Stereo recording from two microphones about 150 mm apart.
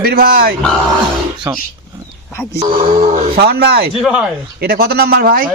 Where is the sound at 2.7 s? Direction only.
40° right (ahead or behind).